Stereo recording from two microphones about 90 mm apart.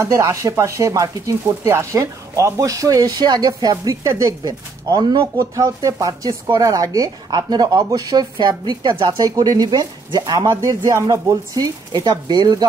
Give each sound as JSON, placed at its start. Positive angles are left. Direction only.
{"t": 0.0, "sound": "speech", "side_deg": -35}